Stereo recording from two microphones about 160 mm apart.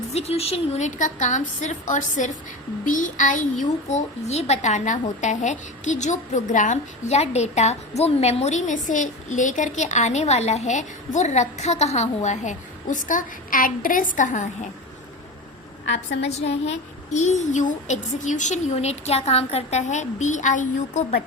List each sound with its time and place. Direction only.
0.1 s a child's voice: 40° left (ahead or behind)
16.0 s a woman's voice: 90° left
16.5 s a child's voice: 40° left (ahead or behind)